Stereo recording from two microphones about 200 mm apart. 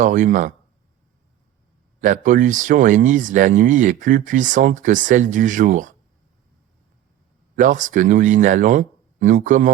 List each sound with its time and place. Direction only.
0.0 s speech: 40° right (ahead or behind)
2.0 s speech: 40° right (ahead or behind)
7.5 s speech: 40° right (ahead or behind)